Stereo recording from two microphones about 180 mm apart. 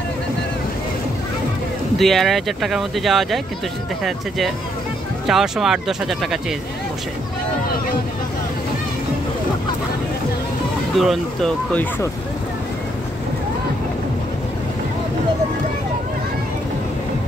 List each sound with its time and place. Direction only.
2.0 s speech: centre (ahead or behind)
5.2 s speech: centre (ahead or behind)
11.0 s speech: centre (ahead or behind)